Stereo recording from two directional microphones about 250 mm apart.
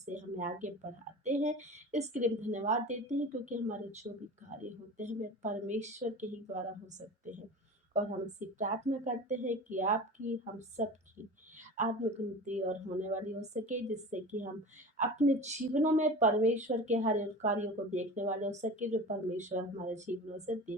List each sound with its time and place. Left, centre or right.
0.0 s a sound: right
1.2 s a woman's voice: right
11.8 s a woman's voice: right